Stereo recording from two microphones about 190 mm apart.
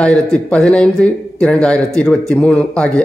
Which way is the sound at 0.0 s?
5° left (ahead or behind).